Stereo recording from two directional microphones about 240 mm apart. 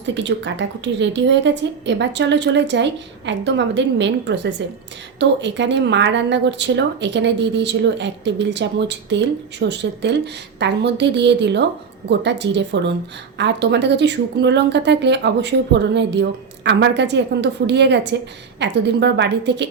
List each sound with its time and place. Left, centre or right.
0.0 s speech: right